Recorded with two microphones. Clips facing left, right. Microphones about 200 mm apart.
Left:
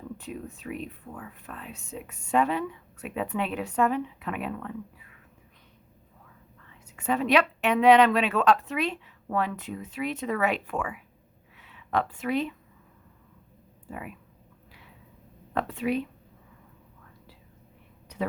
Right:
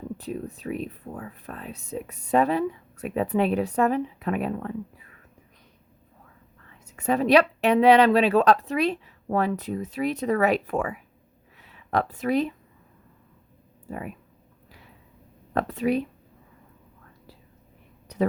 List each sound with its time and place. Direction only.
0.2 s speech: 35° right (ahead or behind)
6.9 s speech: 40° right (ahead or behind)
15.5 s speech: 40° right (ahead or behind)
18.1 s a sound: 40° right (ahead or behind)